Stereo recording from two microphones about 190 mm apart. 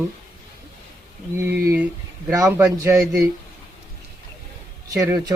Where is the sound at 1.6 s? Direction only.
10° right (ahead or behind).